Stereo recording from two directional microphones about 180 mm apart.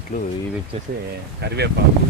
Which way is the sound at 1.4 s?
65° right (ahead or behind).